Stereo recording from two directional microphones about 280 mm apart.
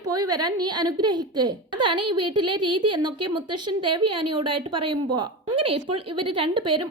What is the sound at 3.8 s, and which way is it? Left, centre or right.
Speech, right.